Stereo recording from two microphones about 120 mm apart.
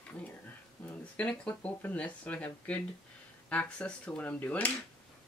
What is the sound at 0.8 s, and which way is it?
Speech, 10° left (ahead or behind).